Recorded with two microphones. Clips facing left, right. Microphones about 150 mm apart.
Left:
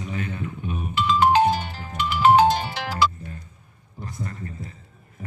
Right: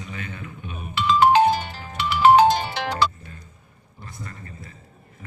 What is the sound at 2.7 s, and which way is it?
Music, 5° left (ahead or behind).